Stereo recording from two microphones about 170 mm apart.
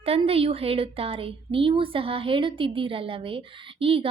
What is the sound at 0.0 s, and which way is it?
A woman's voice, 35° right (ahead or behind).